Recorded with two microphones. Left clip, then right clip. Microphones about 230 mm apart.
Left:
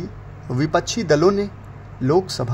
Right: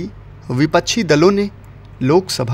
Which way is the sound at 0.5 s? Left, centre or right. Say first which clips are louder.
Right 5 dB; right.